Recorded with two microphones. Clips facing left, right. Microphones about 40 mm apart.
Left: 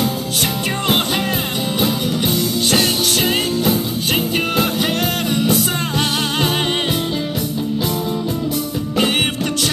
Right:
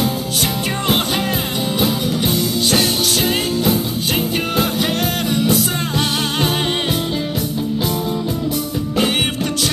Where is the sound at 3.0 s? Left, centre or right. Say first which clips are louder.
Even; left.